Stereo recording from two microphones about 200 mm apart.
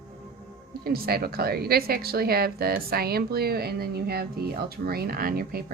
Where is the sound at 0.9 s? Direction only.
50° right (ahead or behind).